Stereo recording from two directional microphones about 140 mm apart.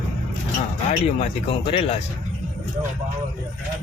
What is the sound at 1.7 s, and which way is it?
Speech, 40° left (ahead or behind).